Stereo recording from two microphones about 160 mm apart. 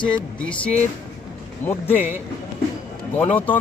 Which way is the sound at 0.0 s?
5° left (ahead or behind).